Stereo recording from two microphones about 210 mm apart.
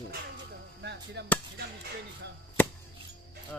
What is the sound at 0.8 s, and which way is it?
Speech, 55° right (ahead or behind).